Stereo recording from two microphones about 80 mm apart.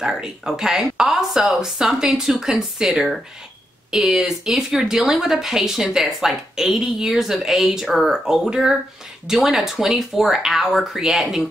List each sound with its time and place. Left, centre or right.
0.0 s speech: centre